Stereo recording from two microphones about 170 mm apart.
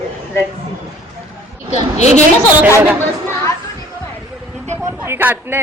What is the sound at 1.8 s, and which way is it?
Speech, 40° left (ahead or behind).